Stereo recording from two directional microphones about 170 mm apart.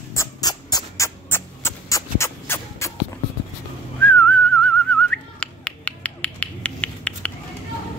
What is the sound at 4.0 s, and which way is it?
Whistling, 10° left (ahead or behind).